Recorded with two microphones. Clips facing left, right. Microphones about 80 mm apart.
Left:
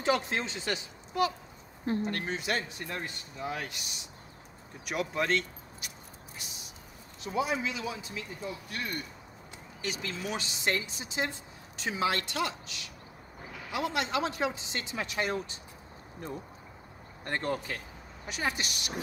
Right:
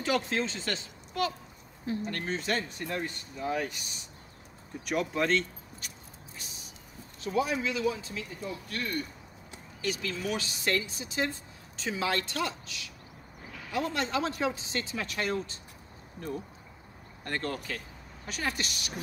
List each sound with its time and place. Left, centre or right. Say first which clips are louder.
0.0 s a man's voice: even; left
4.8 s speech: right 2 dB; centre
7.2 s a man's voice: right 2 dB; left
17.2 s speech: left 2 dB; left